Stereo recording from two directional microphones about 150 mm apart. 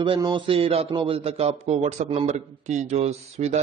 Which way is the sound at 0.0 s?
35° right (ahead or behind).